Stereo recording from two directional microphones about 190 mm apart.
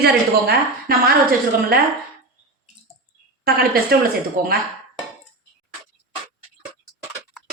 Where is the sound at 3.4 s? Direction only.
55° right (ahead or behind).